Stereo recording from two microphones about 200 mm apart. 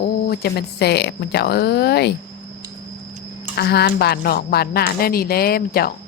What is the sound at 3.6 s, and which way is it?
Speech, 55° left (ahead or behind).